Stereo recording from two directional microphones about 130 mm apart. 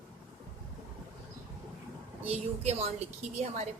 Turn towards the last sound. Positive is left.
turn(degrees=-55)  # may be behind; listen again after turning